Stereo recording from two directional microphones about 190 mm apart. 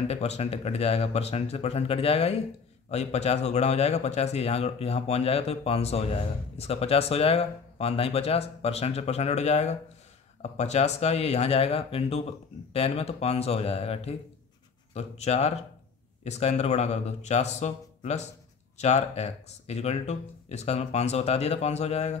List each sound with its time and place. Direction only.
0.1 s speech: 35° left (ahead or behind)